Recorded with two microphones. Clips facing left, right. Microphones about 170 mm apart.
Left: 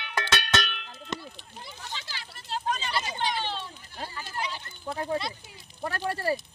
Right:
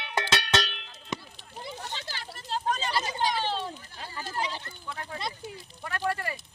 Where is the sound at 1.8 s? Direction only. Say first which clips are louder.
Right 2 dB; 45° right (ahead or behind).